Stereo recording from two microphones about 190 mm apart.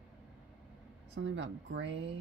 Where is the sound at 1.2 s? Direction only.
75° right (ahead or behind).